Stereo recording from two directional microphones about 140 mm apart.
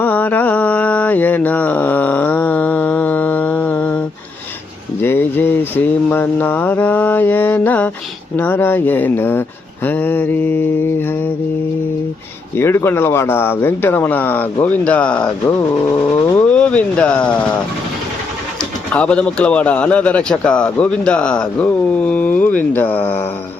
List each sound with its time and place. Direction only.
0.0 s mantra: 10° left (ahead or behind)
4.9 s a sound: 15° left (ahead or behind)
8.4 s a man's voice: 15° left (ahead or behind)
12.5 s a man's voice: 15° left (ahead or behind)
18.9 s a man's voice: 10° left (ahead or behind)